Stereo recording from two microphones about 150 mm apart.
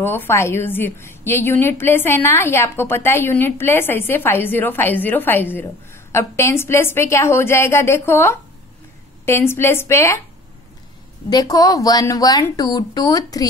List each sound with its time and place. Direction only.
0.0 s a woman's voice: 15° left (ahead or behind)
11.2 s speech: 25° left (ahead or behind)